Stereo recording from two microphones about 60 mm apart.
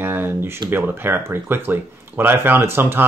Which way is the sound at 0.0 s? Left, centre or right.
Right.